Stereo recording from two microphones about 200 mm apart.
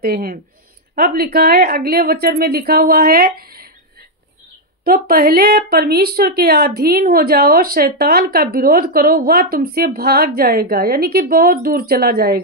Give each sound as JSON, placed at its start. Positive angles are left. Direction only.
{"t": 0.0, "sound": "a woman's voice", "side_deg": -50}
{"t": 4.8, "sound": "a woman's voice", "side_deg": -50}